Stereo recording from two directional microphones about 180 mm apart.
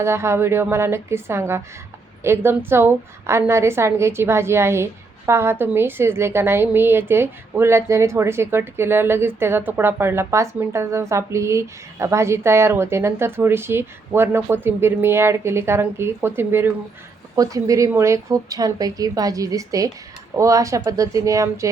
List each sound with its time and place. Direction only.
0.0 s a woman's voice: 15° right (ahead or behind)